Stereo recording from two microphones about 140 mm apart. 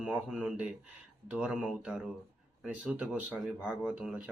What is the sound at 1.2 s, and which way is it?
Speech, 5° right (ahead or behind).